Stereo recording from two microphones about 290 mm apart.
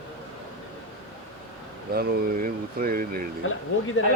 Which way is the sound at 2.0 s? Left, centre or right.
Right.